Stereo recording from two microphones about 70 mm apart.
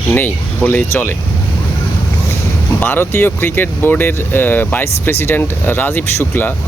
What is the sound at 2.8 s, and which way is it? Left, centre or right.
Speech, left.